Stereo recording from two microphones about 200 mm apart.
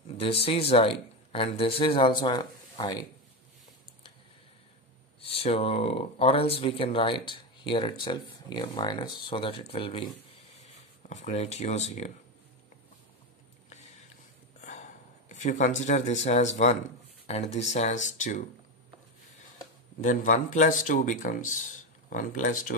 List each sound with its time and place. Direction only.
0.2 s speech: 30° left (ahead or behind)
5.2 s speech: 30° left (ahead or behind)
13.7 s a sound: 35° left (ahead or behind)
14.6 s speech: 35° left (ahead or behind)
20.0 s speech: 40° left (ahead or behind)